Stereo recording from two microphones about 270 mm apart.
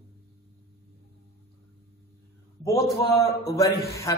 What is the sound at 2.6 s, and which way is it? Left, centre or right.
A man's voice, centre.